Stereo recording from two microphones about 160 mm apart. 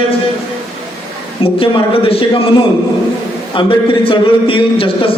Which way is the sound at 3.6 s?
30° left (ahead or behind).